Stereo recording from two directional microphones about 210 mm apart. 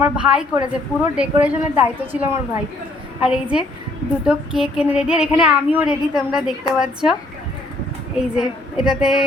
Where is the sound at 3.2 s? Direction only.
5° right (ahead or behind).